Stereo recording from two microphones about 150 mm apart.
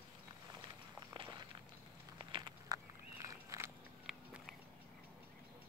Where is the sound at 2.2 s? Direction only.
35° right (ahead or behind).